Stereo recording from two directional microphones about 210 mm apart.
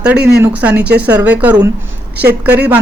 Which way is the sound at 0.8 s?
50° right (ahead or behind).